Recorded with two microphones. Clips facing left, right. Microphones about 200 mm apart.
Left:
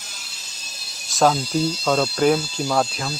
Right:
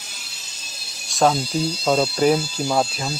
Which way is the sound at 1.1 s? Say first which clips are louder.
Even; centre (ahead or behind).